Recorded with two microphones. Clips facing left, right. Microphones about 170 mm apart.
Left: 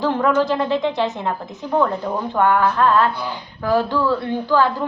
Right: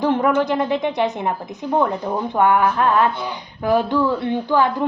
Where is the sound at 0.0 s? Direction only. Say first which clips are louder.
Even; 20° right (ahead or behind).